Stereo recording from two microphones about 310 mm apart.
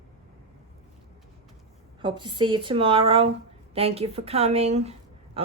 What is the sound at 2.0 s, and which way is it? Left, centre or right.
Speech, centre.